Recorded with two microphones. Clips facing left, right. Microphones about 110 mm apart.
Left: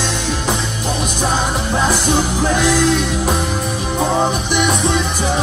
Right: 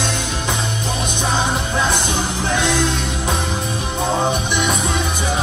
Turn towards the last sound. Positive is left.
turn(degrees=5)  # may be behind; listen again after turning